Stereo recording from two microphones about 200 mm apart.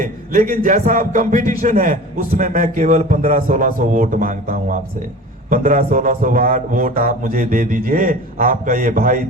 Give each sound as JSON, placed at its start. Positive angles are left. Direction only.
{"t": 0.0, "sound": "a man's voice", "side_deg": -40}